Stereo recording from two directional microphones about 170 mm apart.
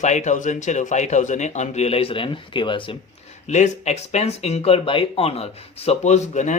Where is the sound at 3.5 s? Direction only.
40° left (ahead or behind).